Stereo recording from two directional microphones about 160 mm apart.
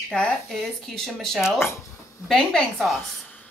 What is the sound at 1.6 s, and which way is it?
Speech, 15° left (ahead or behind).